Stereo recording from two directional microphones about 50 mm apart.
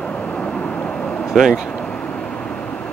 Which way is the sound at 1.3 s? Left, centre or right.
Centre.